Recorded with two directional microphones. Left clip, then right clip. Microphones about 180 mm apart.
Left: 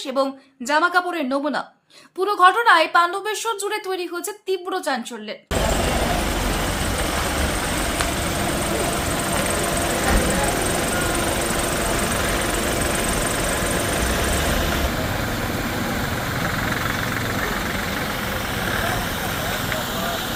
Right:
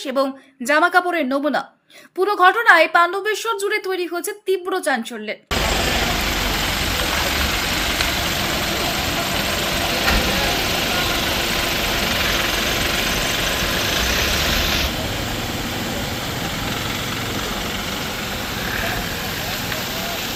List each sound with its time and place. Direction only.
0.7 s a woman's voice: 15° right (ahead or behind)